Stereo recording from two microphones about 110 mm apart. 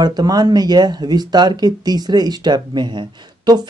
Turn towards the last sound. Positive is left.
turn(degrees=-40)  # may be behind; listen again after turning